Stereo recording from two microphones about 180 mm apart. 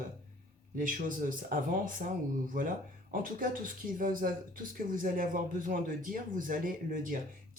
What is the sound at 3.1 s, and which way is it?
A man's voice, 50° right (ahead or behind).